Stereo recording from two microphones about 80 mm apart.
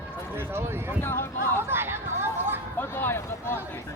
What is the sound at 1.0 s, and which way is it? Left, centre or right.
Speech, left.